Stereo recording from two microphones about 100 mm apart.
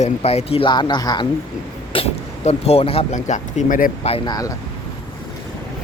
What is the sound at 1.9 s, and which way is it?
Speech, 80° left.